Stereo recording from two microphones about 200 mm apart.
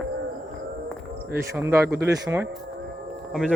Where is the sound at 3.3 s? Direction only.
Centre (ahead or behind).